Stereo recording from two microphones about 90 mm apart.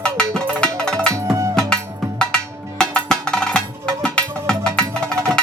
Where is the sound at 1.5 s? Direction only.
10° left (ahead or behind).